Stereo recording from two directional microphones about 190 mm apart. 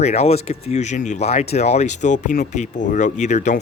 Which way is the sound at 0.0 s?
35° left (ahead or behind).